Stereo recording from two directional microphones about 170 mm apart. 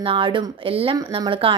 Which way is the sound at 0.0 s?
30° right (ahead or behind).